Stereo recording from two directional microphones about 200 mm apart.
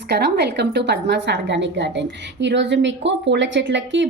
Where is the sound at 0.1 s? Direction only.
55° right (ahead or behind).